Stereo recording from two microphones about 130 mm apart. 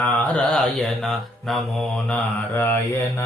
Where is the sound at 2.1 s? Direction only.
15° left (ahead or behind).